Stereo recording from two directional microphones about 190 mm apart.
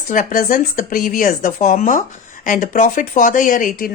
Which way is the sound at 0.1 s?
45° left (ahead or behind).